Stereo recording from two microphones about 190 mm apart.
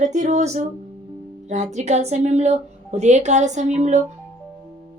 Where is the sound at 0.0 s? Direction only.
40° right (ahead or behind).